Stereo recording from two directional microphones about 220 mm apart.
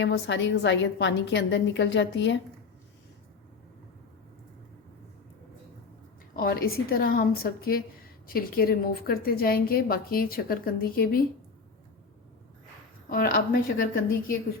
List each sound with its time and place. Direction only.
0.0 s a woman's voice: 55° left (ahead or behind)
6.4 s a woman's voice: 40° left (ahead or behind)
13.1 s a woman's voice: 40° left (ahead or behind)